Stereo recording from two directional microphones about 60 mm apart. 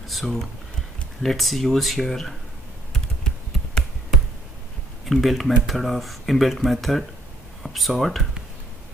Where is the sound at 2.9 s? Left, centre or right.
Centre.